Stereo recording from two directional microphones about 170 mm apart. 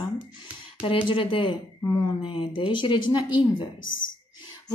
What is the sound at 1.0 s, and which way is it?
A woman's voice, 30° left (ahead or behind).